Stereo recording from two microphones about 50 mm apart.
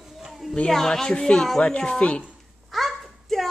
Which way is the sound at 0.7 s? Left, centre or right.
Centre.